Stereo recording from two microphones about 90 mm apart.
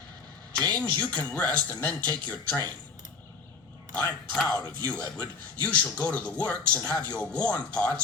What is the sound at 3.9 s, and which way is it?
A man's voice, 20° left (ahead or behind).